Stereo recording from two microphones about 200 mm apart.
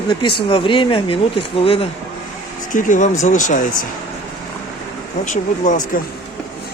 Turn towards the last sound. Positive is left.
turn(degrees=40)  # may be behind; listen again after turning